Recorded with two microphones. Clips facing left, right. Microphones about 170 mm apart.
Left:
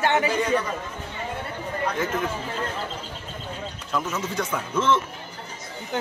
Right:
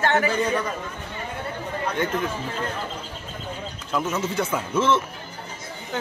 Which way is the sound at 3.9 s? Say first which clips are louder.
Right 3 dB; centre (ahead or behind).